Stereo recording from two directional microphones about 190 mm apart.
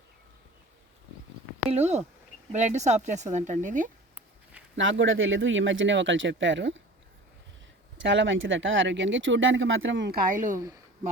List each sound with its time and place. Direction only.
1.7 s speech: 35° right (ahead or behind)
4.8 s speech: 85° right
7.9 s speech: 75° right (ahead or behind); by 10.6 s 45° right (ahead or behind)